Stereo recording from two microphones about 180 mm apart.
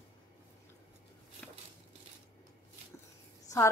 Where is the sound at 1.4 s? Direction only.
5° left (ahead or behind).